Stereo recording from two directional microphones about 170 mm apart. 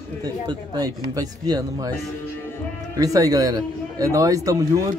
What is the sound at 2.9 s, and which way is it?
A man's voice, 20° right (ahead or behind).